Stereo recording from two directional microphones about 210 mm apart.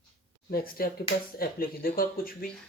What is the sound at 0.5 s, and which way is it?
Speech, 45° left (ahead or behind).